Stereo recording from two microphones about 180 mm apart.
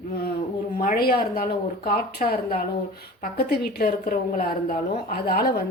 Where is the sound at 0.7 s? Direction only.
50° left (ahead or behind).